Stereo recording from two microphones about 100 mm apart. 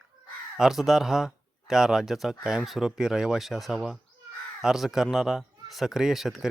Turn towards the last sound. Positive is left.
turn(degrees=0)  # may be behind; listen again after turning